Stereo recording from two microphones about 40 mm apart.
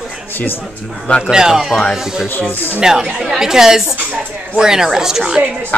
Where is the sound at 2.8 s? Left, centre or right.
Centre.